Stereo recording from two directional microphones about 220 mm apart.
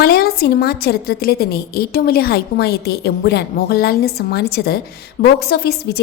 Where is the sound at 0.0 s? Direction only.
45° left (ahead or behind).